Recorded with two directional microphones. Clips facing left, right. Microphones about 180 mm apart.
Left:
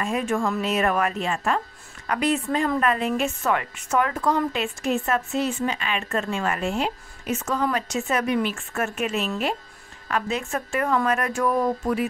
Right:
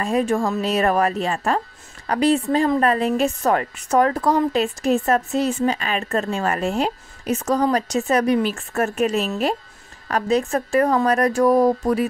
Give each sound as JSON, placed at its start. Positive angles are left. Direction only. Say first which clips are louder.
{"t": 0.0, "sound": "a woman's voice", "louder": "right 4 dB", "side_deg": -35}